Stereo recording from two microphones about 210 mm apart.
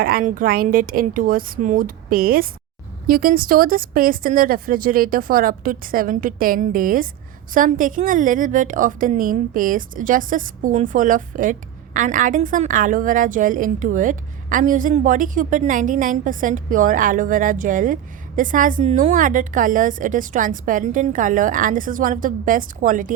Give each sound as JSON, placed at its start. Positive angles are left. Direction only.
{"t": 0.0, "sound": "a woman's voice", "side_deg": -45}